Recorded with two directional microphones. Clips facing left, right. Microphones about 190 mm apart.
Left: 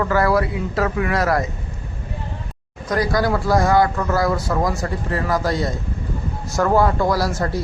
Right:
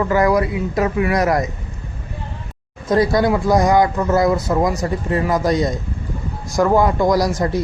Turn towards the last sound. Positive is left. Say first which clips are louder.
# right 4 dB
turn(degrees=-15)  # may be behind; listen again after turning